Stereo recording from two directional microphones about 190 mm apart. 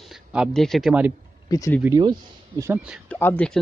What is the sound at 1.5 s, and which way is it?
Speech, 15° left (ahead or behind).